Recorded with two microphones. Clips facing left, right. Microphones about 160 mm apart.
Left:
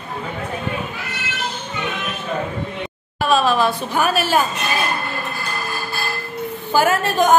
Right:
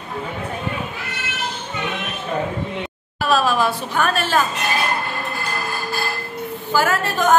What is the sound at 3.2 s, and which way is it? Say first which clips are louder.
Speech: left 1 dB; 5° right (ahead or behind).